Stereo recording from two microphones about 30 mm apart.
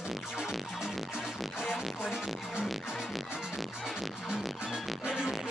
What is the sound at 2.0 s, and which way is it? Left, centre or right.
Music, centre.